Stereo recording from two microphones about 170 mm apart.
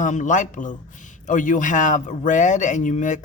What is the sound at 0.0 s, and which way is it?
A woman's voice, 45° left (ahead or behind).